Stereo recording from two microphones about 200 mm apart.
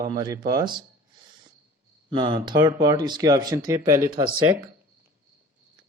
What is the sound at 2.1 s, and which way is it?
Speech, 25° right (ahead or behind).